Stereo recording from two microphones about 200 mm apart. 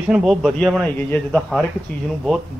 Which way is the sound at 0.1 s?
Centre (ahead or behind).